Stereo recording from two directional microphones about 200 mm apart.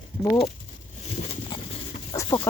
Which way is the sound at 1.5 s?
25° left (ahead or behind).